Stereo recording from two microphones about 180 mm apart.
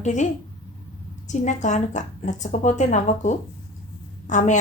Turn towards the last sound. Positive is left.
turn(degrees=40)  # may be behind; listen again after turning